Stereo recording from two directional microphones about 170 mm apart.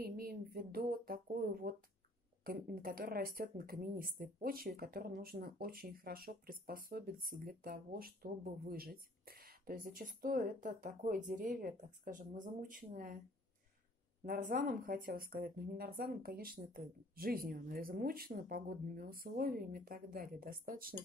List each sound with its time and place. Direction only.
0.0 s speech: 60° right (ahead or behind)
14.2 s speech: 60° right (ahead or behind)